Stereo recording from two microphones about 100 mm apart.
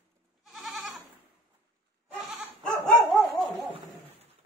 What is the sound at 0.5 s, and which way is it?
Goat, centre (ahead or behind).